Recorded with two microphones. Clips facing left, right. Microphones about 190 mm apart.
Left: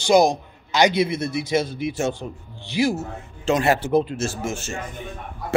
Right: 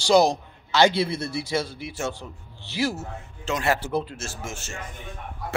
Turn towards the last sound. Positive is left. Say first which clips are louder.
# left 8 dB
turn(degrees=15)  # may be behind; listen again after turning